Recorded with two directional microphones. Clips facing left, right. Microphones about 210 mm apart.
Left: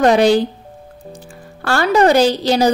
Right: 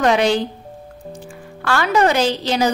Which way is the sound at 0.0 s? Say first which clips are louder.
Left 4 dB; 35° left (ahead or behind).